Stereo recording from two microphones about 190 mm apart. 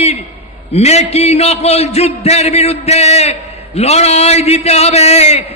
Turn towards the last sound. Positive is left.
turn(degrees=35)  # may be behind; listen again after turning